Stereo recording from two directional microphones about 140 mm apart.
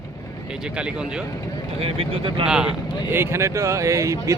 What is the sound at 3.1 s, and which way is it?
Speech, 15° right (ahead or behind).